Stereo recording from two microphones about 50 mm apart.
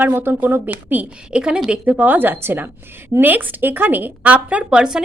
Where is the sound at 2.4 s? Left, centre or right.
Right.